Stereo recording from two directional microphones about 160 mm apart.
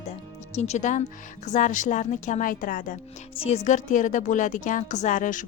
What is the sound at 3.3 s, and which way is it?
Speech, 35° left (ahead or behind).